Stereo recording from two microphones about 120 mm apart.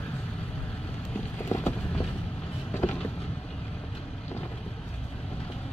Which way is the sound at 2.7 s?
15° left (ahead or behind).